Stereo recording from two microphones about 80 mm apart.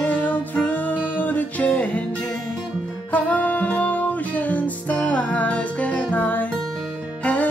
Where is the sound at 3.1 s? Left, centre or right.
Centre.